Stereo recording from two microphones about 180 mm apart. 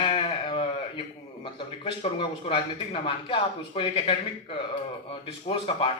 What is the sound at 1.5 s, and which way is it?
Speech, 30° left (ahead or behind).